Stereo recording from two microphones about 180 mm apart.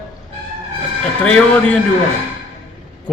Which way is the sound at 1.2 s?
5° left (ahead or behind).